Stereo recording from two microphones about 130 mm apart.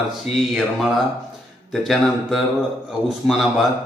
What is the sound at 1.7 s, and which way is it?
Speech, centre (ahead or behind).